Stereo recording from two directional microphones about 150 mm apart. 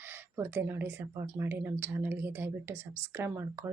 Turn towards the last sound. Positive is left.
turn(degrees=-15)  # may be behind; listen again after turning